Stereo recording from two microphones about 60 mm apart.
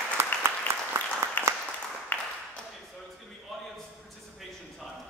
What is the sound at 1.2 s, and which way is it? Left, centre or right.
Applause, right.